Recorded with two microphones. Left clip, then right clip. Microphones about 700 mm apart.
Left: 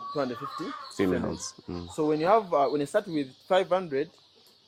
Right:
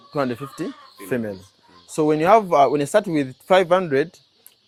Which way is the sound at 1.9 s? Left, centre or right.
Right.